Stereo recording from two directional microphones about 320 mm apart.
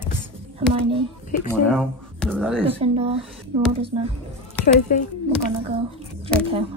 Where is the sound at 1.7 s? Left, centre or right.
Centre.